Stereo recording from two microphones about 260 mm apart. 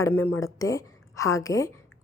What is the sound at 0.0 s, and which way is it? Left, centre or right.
A woman's voice, centre.